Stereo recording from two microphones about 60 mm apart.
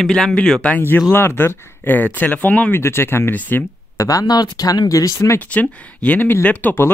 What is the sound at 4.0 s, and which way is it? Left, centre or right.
Speech, left.